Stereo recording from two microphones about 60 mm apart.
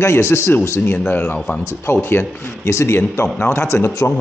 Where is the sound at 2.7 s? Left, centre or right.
Left.